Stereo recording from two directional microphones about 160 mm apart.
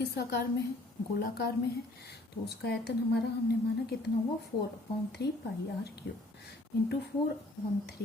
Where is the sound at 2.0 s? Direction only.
90° left.